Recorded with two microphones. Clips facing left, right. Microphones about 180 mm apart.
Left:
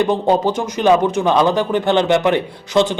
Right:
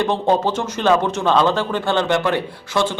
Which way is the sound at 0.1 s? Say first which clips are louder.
Left 2 dB; 15° left (ahead or behind).